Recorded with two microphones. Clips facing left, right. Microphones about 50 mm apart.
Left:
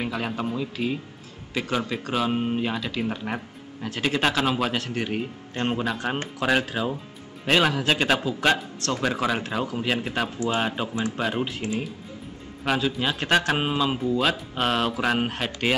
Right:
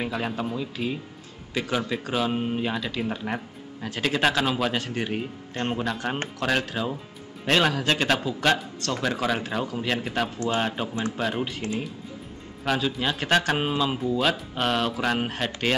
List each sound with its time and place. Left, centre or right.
0.0 s speech: centre
12.6 s speech: centre